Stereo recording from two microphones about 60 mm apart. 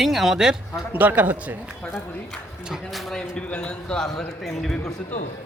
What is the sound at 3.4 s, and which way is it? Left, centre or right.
Speech, left.